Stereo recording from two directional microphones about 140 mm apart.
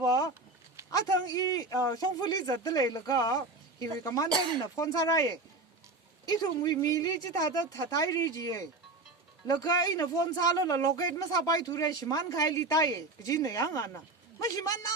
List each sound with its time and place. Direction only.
0.1 s a sound: 25° left (ahead or behind)
0.9 s a man's voice: 25° left (ahead or behind)
6.6 s a man's voice: 25° left (ahead or behind)